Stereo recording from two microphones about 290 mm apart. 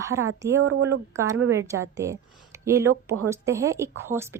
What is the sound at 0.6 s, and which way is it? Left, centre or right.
Speech, right.